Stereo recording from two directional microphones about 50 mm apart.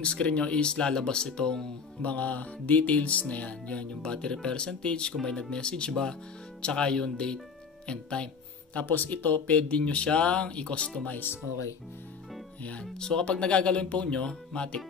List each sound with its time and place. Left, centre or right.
0.0 s music: left
2.0 s music: left
5.1 s speech: centre
7.8 s music: centre
8.8 s music: left
11.1 s speech: left
12.9 s music: centre